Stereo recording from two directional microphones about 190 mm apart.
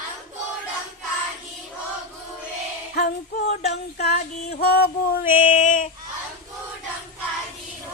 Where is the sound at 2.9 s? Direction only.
60° left (ahead or behind).